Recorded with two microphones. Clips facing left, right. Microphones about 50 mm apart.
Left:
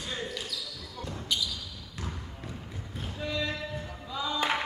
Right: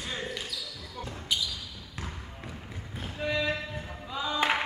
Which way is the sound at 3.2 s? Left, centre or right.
Right.